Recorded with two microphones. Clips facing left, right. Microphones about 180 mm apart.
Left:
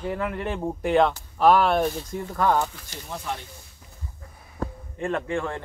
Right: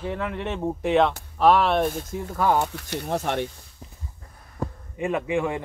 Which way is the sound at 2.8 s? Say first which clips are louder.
Right 10 dB; 65° right (ahead or behind).